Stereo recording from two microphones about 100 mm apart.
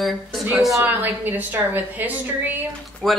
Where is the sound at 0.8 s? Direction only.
20° right (ahead or behind).